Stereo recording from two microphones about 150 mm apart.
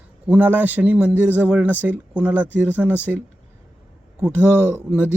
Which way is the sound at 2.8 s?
Centre (ahead or behind).